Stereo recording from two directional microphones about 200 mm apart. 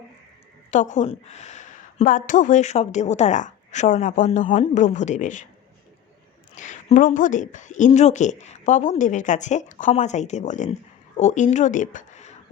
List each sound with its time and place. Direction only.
0.7 s a woman's voice: 40° left (ahead or behind)
6.6 s a woman's voice: 35° left (ahead or behind)